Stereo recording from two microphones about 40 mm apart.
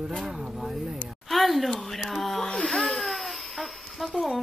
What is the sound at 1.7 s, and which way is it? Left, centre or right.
Speech, centre.